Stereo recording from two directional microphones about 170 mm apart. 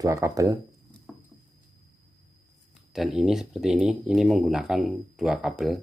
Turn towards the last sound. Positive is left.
turn(degrees=0)  # may be behind; listen again after turning